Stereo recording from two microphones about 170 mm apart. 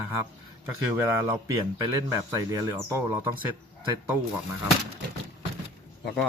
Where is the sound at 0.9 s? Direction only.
15° right (ahead or behind).